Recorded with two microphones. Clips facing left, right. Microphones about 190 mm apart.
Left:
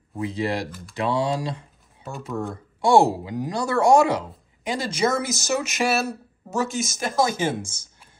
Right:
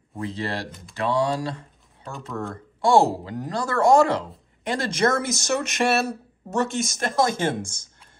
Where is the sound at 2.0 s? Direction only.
5° left (ahead or behind).